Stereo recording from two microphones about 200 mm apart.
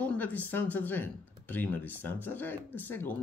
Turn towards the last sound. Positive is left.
turn(degrees=10)  # may be behind; listen again after turning